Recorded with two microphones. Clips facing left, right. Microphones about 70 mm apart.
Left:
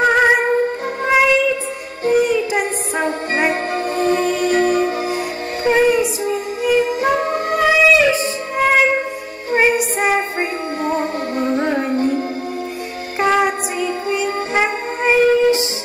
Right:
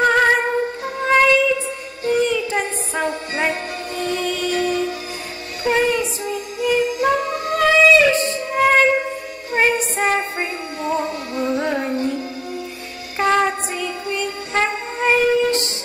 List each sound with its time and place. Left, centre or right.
0.0 s music: centre
2.2 s child singing: centre
3.0 s music: left
3.7 s music: left
5.8 s child singing: centre
6.8 s music: left
7.5 s music: centre
10.8 s music: left
13.2 s music: centre